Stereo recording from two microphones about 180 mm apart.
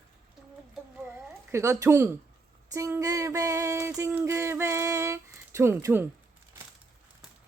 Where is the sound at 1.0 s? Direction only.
15° right (ahead or behind).